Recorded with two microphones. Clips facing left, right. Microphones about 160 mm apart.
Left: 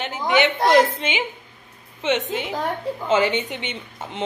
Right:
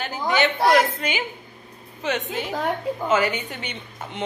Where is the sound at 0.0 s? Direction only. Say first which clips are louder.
Left 2 dB; 20° left (ahead or behind).